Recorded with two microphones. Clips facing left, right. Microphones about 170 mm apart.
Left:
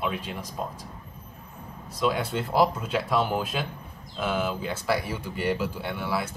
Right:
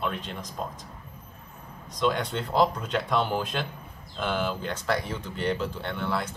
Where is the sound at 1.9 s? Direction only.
5° left (ahead or behind).